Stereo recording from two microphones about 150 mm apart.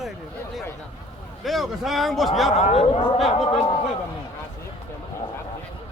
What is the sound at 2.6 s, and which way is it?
Speech, 45° left (ahead or behind).